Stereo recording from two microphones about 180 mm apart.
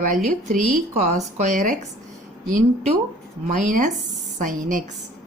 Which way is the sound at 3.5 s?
45° right (ahead or behind).